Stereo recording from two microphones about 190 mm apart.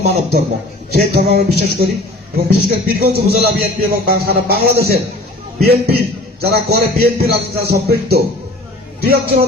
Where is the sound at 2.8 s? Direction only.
55° right (ahead or behind).